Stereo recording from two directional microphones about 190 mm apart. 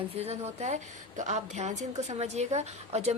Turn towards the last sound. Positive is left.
turn(degrees=-35)  # may be behind; listen again after turning